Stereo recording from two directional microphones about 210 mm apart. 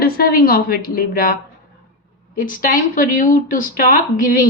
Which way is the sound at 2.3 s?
40° left (ahead or behind).